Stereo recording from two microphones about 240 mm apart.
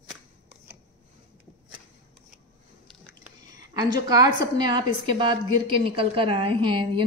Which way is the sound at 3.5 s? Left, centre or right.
Centre.